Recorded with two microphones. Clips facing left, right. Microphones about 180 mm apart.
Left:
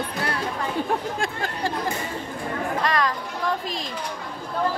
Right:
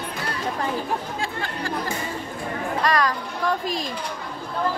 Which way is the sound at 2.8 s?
25° left (ahead or behind).